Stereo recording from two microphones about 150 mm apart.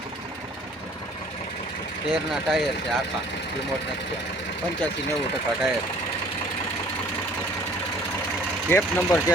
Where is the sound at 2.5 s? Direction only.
Centre (ahead or behind).